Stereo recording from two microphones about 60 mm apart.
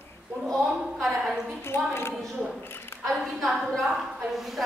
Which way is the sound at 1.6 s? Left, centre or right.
Left.